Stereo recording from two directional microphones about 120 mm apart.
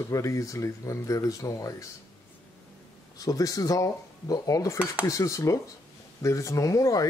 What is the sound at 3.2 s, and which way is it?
Speech, 30° left (ahead or behind).